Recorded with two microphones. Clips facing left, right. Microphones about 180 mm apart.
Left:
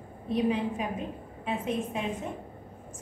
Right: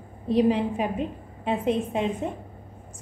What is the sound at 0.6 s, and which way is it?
Speech, 75° right (ahead or behind).